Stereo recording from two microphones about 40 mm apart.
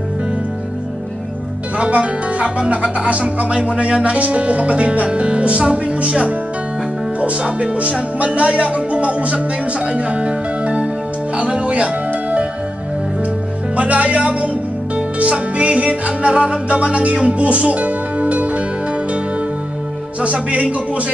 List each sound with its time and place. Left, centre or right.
1.8 s speech: right
11.3 s music: right
13.7 s speech: right
15.0 s music: right
20.2 s speech: right